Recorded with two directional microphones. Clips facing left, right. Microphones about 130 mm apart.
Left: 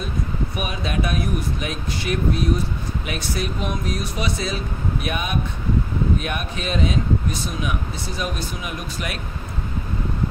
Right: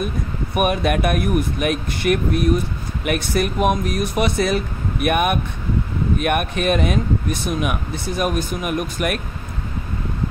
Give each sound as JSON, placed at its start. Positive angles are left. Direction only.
{"t": 0.6, "sound": "speech", "side_deg": -60}